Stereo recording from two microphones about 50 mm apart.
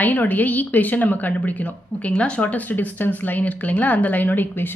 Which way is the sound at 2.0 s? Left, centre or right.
Left.